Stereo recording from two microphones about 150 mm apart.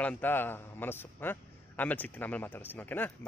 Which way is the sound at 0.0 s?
10° left (ahead or behind).